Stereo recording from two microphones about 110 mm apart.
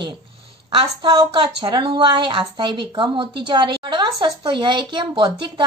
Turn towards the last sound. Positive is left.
turn(degrees=-45)  # may be behind; listen again after turning